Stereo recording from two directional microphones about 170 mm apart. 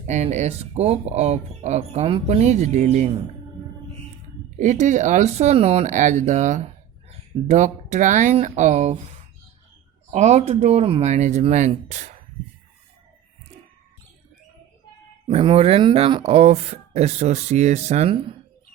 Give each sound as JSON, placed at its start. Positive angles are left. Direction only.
{"t": 0.1, "sound": "speech", "side_deg": -45}
{"t": 4.6, "sound": "speech", "side_deg": -45}
{"t": 10.1, "sound": "speech", "side_deg": -40}
{"t": 15.3, "sound": "speech", "side_deg": -35}